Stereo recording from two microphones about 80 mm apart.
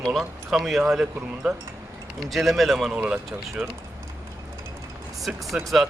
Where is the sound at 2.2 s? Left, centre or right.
Centre.